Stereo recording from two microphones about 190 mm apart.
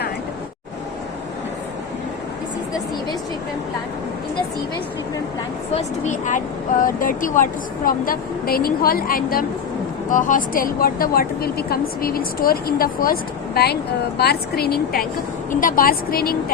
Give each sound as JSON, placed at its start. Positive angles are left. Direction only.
{"t": 5.7, "sound": "a woman's voice", "side_deg": 40}